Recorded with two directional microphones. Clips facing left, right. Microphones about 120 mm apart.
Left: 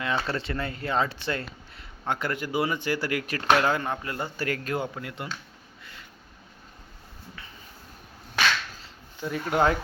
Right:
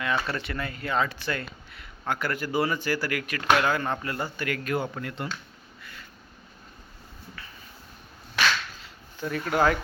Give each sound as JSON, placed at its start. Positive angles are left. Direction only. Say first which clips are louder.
{"t": 0.0, "sound": "speech", "louder": "even", "side_deg": 25}
{"t": 4.4, "sound": "a man's voice", "louder": "left 1 dB", "side_deg": 35}
{"t": 4.8, "sound": "speech", "louder": "right 1 dB", "side_deg": 15}
{"t": 9.2, "sound": "speech", "louder": "even", "side_deg": 15}